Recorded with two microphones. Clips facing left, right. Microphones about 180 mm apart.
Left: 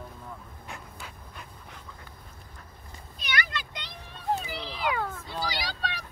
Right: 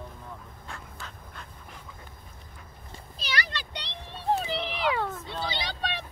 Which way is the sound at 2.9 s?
30° right (ahead or behind).